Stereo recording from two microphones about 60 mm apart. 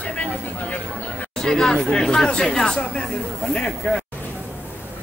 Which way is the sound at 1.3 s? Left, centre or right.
Centre.